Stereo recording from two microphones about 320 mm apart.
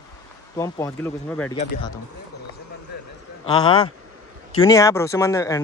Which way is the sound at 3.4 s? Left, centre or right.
Centre.